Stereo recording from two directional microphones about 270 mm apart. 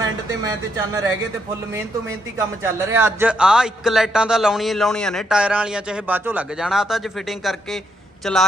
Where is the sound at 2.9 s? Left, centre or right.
Centre.